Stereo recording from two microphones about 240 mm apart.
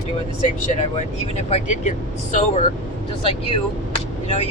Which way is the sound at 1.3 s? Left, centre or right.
Left.